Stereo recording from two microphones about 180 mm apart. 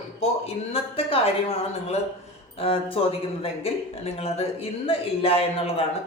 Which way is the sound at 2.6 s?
30° left (ahead or behind).